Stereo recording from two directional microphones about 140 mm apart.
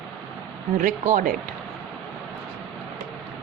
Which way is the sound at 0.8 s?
70° right (ahead or behind).